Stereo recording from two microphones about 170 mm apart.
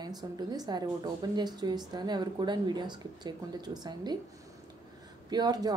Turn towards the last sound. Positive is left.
turn(degrees=-20)  # may be behind; listen again after turning